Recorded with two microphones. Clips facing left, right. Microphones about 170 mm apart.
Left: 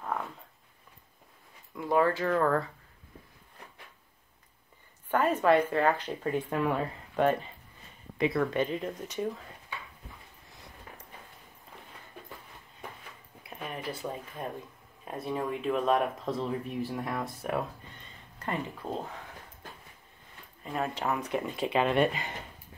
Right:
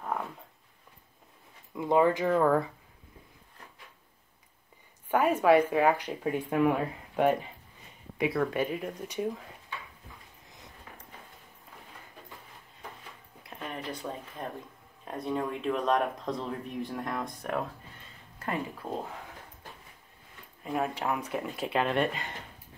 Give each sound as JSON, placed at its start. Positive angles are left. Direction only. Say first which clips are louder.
{"t": 1.8, "sound": "speech", "louder": "right 2 dB", "side_deg": -20}
{"t": 5.1, "sound": "speech", "louder": "right 2 dB", "side_deg": -10}
{"t": 13.5, "sound": "speech", "louder": "even", "side_deg": 5}
{"t": 17.9, "sound": "a sound", "louder": "even", "side_deg": -5}
{"t": 20.6, "sound": "speech", "louder": "right 1 dB", "side_deg": -5}